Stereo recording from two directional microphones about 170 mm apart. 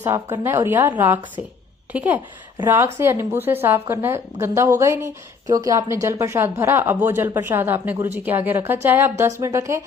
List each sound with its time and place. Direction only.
0.0 s a woman's voice: 15° right (ahead or behind)